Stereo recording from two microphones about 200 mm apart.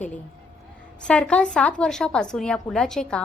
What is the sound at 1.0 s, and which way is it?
A woman's voice, 5° left (ahead or behind).